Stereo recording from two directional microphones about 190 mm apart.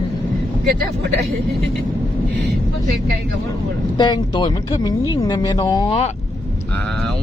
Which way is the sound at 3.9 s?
25° left (ahead or behind).